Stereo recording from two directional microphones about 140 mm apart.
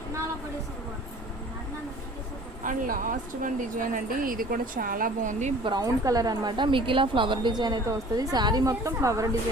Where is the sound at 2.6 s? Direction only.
75° right (ahead or behind).